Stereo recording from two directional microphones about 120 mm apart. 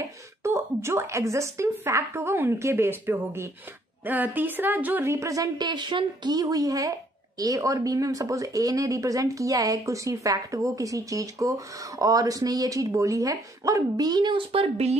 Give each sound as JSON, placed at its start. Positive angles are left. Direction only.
{"t": 0.4, "sound": "a woman's voice", "side_deg": -25}